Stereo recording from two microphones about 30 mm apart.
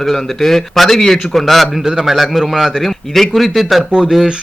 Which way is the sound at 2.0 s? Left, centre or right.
Centre.